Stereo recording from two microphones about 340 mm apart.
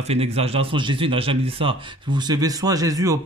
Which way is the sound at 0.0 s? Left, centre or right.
Centre.